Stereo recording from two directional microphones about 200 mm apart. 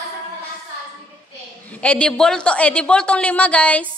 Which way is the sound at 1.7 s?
5° left (ahead or behind).